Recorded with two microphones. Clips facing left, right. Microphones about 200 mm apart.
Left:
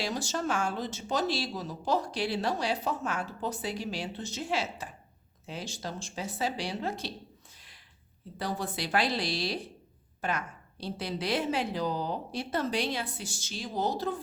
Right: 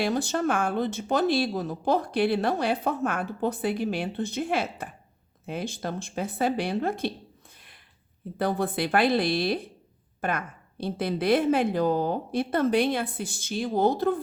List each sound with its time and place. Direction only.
0.0 s speech: 55° right (ahead or behind)
8.4 s speech: 55° right (ahead or behind)